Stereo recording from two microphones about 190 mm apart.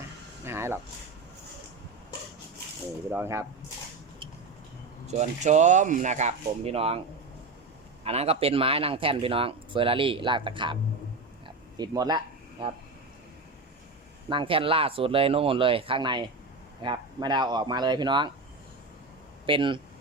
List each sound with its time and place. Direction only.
0.4 s a sound: 15° right (ahead or behind)
3.1 s speech: 15° right (ahead or behind)
5.0 s speech: 40° right (ahead or behind)
8.0 s speech: 30° right (ahead or behind)
11.4 s a sound: 20° right (ahead or behind)
14.3 s speech: 25° right (ahead or behind)
19.5 s speech: 25° right (ahead or behind)